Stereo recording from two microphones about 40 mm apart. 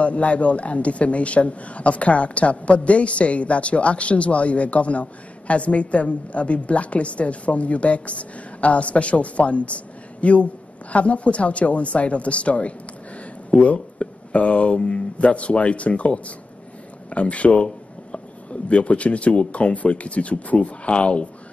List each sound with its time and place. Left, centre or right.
0.0 s a man's voice: left